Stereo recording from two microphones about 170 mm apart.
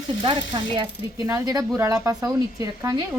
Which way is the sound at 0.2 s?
30° right (ahead or behind).